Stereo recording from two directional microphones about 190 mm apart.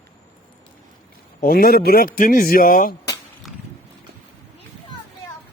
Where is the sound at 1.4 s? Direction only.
50° left (ahead or behind).